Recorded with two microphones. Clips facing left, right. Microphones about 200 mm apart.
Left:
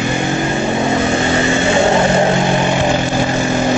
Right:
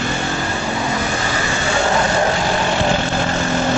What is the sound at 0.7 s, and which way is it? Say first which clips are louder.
Vehicle: left 7 dB; 25° left (ahead or behind).